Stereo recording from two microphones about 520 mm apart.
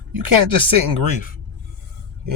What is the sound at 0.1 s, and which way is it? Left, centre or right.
Speech, right.